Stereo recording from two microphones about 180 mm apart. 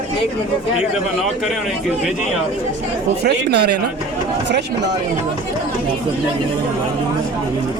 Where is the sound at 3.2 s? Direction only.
65° right (ahead or behind).